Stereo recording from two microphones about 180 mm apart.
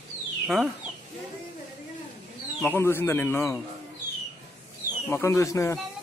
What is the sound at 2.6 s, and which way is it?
Speech, 10° left (ahead or behind).